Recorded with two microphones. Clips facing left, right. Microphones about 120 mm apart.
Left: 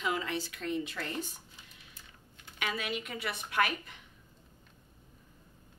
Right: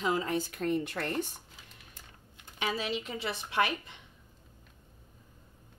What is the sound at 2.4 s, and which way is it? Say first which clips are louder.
A woman's voice: right 3 dB; 30° right (ahead or behind).